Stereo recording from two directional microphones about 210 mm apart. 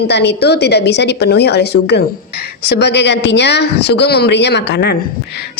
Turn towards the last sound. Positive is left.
turn(degrees=55)  # may be behind; listen again after turning